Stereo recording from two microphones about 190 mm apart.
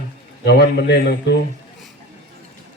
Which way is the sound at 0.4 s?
60° left (ahead or behind).